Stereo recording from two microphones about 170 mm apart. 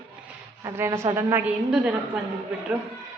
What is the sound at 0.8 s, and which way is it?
Speech, 15° right (ahead or behind).